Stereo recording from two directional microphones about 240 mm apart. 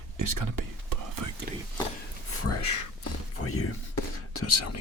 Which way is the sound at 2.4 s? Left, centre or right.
Left.